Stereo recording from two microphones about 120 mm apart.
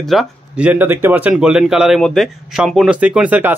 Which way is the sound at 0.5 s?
10° right (ahead or behind).